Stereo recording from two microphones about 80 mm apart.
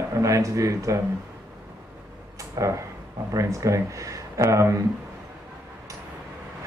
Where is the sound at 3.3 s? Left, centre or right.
Right.